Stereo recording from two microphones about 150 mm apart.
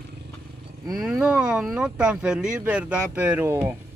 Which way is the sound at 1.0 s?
5° right (ahead or behind).